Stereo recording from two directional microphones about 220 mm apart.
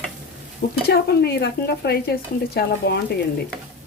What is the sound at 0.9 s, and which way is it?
Speech, 45° left (ahead or behind).